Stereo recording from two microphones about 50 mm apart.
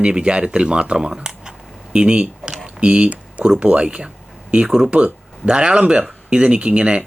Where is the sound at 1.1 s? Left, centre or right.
Centre.